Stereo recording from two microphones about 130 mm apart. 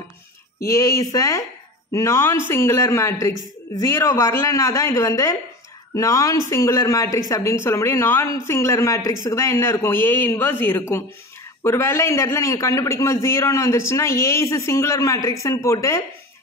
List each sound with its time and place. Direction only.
0.7 s speech: 20° left (ahead or behind)